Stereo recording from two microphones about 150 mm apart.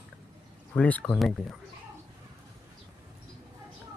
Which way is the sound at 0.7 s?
10° left (ahead or behind).